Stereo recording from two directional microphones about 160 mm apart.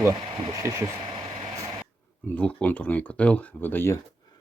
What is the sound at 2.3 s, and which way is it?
Speech, 10° left (ahead or behind).